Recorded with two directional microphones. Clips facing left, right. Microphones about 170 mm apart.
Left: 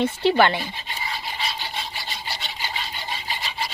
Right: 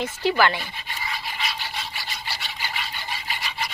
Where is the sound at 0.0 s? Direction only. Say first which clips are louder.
Left 3 dB; 25° left (ahead or behind).